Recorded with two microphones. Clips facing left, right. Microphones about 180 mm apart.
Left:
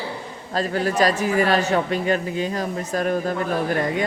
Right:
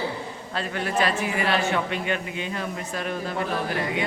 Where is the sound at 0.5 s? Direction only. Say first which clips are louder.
Left 5 dB; 40° left (ahead or behind).